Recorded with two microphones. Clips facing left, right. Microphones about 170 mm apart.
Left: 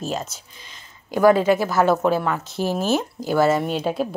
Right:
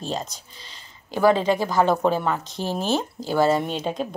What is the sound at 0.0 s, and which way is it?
Speech, 5° left (ahead or behind).